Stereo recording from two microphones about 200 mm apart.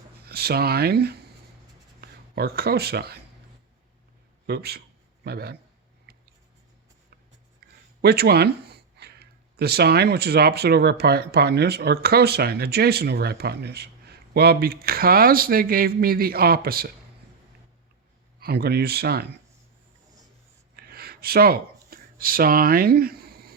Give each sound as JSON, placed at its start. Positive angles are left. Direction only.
{"t": 0.3, "sound": "speech", "side_deg": -50}
{"t": 4.4, "sound": "speech", "side_deg": -55}
{"t": 6.1, "sound": "writing", "side_deg": -50}
{"t": 7.6, "sound": "a sound", "side_deg": -50}
{"t": 8.0, "sound": "speech", "side_deg": -50}
{"t": 18.3, "sound": "speech", "side_deg": -50}
{"t": 20.7, "sound": "a sound", "side_deg": -50}